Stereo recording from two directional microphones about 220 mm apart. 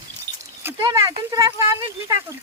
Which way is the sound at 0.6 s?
15° right (ahead or behind).